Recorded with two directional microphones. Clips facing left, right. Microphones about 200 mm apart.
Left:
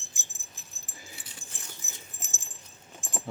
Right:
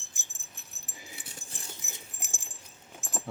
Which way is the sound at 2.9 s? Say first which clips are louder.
Left 1 dB; 5° right (ahead or behind).